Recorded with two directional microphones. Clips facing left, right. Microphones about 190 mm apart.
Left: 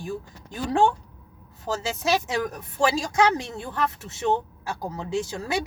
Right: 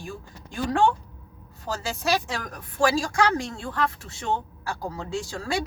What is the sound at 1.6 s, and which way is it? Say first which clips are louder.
Speech: left 2 dB; 20° left (ahead or behind).